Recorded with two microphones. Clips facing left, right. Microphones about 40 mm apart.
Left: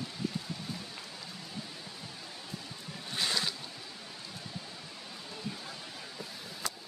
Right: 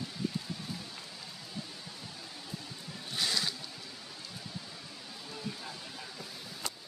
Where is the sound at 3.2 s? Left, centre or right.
Left.